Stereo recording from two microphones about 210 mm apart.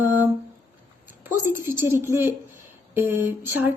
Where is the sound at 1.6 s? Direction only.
10° right (ahead or behind).